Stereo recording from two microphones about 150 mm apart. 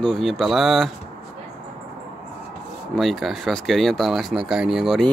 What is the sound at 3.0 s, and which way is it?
A man's voice, centre (ahead or behind).